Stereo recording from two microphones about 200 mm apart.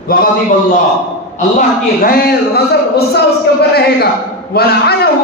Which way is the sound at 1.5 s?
45° left (ahead or behind).